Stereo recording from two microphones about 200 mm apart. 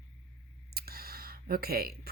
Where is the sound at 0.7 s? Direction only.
50° right (ahead or behind).